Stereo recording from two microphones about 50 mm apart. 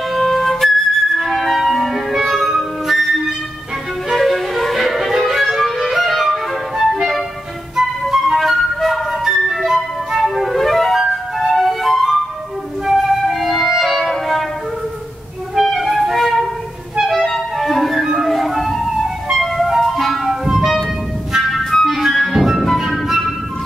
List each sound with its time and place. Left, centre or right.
0.1 s flute: centre
4.1 s music: centre
8.4 s flute: centre
12.8 s music: centre
15.5 s music: centre
18.1 s flute: centre
19.3 s music: centre
21.5 s music: centre
22.8 s flute: centre